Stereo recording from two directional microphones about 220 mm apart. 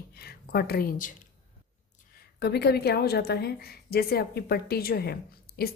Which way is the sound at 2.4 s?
45° left (ahead or behind).